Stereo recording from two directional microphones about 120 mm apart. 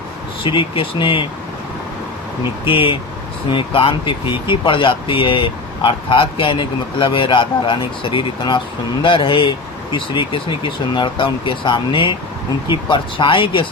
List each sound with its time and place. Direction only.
0.4 s speech: 45° left (ahead or behind)
2.6 s speech: 45° left (ahead or behind)